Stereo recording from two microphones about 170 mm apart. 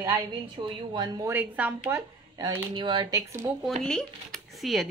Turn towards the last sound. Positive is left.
turn(degrees=0)  # may be behind; listen again after turning